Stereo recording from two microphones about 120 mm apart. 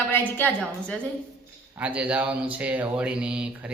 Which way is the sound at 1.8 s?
10° right (ahead or behind).